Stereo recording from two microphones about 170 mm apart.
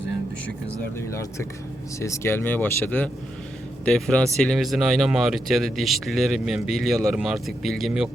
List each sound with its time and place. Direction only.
0.9 s speech: 15° left (ahead or behind); by 8.1 s centre (ahead or behind)